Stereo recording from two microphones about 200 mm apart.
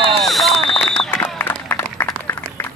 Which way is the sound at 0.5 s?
30° left (ahead or behind).